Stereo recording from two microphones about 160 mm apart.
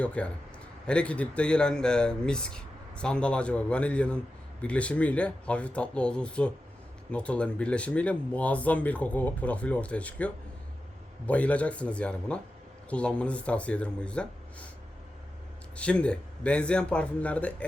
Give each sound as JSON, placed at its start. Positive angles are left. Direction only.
{"t": 0.0, "sound": "speech", "side_deg": 5}
{"t": 15.7, "sound": "speech", "side_deg": 5}